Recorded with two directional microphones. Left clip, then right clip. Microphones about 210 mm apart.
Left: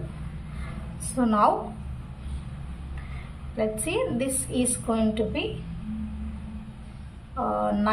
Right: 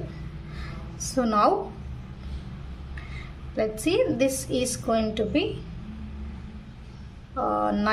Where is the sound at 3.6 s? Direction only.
35° right (ahead or behind).